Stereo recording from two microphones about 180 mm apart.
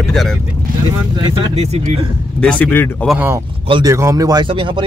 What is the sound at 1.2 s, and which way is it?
Speech, 25° right (ahead or behind).